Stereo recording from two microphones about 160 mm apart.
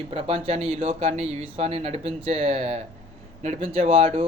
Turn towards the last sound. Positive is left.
turn(degrees=-35)  # may be behind; listen again after turning